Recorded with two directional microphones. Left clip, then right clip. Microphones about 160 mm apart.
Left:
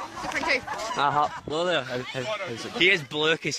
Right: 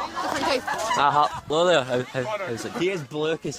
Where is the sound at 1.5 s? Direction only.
15° right (ahead or behind).